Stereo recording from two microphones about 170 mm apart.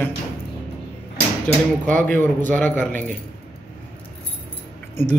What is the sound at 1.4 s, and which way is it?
Speech, 10° left (ahead or behind).